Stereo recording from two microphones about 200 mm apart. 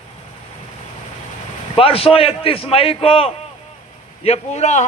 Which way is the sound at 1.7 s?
30° left (ahead or behind).